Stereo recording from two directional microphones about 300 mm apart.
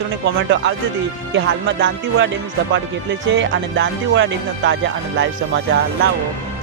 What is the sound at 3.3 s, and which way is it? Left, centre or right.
Speech, right.